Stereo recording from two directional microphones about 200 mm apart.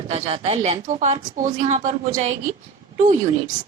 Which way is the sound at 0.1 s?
30° right (ahead or behind).